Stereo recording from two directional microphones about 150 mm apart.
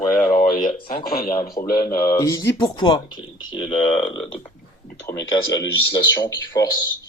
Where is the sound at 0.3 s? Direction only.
60° left (ahead or behind).